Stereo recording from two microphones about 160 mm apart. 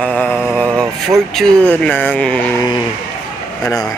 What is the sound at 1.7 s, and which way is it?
Speech, 10° left (ahead or behind).